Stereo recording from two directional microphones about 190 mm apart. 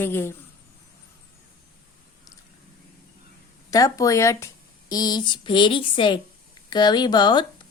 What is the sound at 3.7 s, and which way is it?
A woman's voice, 15° left (ahead or behind).